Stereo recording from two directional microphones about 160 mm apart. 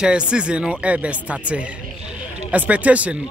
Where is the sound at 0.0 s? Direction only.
5° right (ahead or behind).